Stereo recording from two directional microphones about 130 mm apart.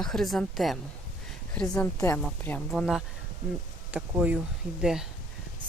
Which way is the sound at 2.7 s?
Centre (ahead or behind).